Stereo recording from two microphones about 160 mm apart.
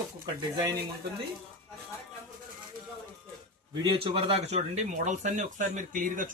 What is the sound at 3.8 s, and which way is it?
Speech, 30° right (ahead or behind).